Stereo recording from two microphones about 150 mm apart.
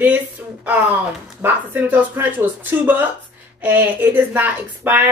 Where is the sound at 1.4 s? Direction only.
15° right (ahead or behind).